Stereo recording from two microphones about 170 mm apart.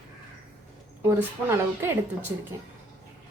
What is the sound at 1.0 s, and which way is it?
Speech, 15° right (ahead or behind).